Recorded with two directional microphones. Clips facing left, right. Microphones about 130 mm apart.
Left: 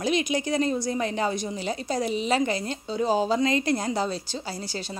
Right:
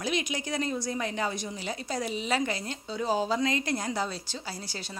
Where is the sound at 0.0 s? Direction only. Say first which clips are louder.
Left 6 dB; 25° left (ahead or behind).